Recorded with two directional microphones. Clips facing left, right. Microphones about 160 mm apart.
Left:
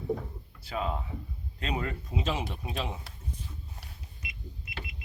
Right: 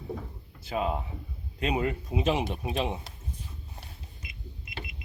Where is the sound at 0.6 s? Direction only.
20° right (ahead or behind).